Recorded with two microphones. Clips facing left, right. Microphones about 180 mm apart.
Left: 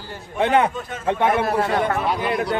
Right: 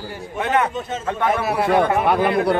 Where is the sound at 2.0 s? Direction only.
55° right (ahead or behind).